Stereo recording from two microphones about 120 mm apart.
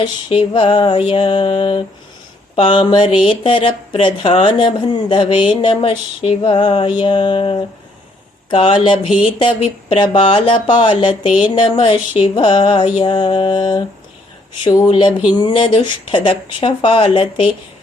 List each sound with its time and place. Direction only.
0.0 s speech: 45° left (ahead or behind)
14.8 s speech: 40° left (ahead or behind)